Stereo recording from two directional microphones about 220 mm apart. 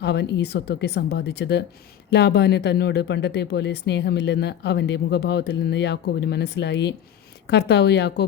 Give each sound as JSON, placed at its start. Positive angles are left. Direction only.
{"t": 0.0, "sound": "speech", "side_deg": 50}